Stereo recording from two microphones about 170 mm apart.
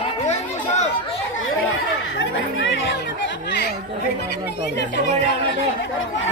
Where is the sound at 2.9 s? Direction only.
85° left.